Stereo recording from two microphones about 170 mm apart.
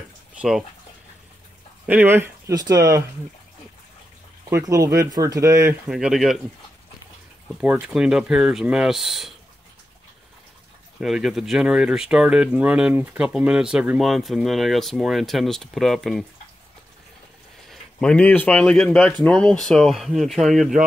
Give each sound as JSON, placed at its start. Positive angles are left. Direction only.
{"t": 0.4, "sound": "speech", "side_deg": 0}
{"t": 1.9, "sound": "speech", "side_deg": -10}
{"t": 4.5, "sound": "speech", "side_deg": -20}
{"t": 5.9, "sound": "speech", "side_deg": -5}
{"t": 7.6, "sound": "speech", "side_deg": -10}
{"t": 11.0, "sound": "speech", "side_deg": 0}
{"t": 17.6, "sound": "speech", "side_deg": 5}